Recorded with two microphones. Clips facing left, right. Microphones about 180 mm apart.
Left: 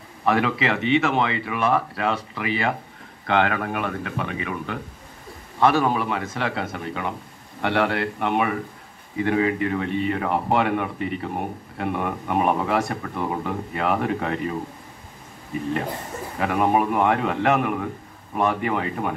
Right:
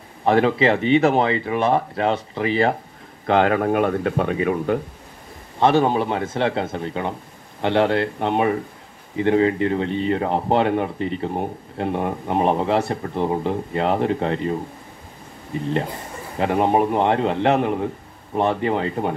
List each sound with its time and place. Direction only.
0.2 s speech: 30° right (ahead or behind)
5.6 s speech: 25° right (ahead or behind)
16.3 s speech: 30° right (ahead or behind)